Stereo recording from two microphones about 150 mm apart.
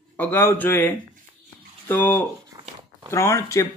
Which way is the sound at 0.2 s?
15° left (ahead or behind).